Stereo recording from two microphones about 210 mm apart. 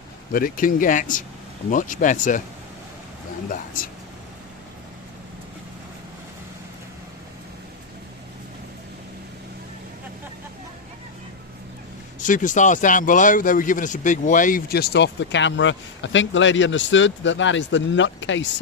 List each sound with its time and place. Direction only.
0.3 s speech: 40° left (ahead or behind)
12.2 s speech: 40° left (ahead or behind); by 18.5 s 60° left (ahead or behind)